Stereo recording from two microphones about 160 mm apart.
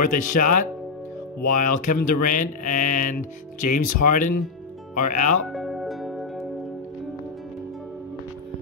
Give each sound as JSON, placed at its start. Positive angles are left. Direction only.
{"t": 0.0, "sound": "speech", "side_deg": 55}
{"t": 5.5, "sound": "music", "side_deg": 0}